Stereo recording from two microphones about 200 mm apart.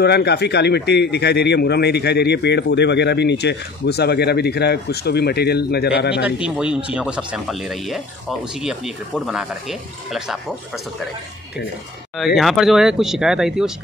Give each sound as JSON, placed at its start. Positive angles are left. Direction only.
{"t": 0.0, "sound": "speech", "side_deg": 55}
{"t": 6.4, "sound": "speech", "side_deg": -5}
{"t": 12.4, "sound": "speech", "side_deg": 0}